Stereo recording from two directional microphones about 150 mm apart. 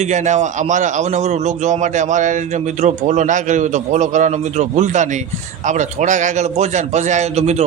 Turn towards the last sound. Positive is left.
turn(degrees=-45)  # may be behind; listen again after turning